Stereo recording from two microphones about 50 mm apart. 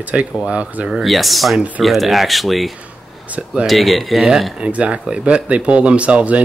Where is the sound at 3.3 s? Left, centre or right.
Right.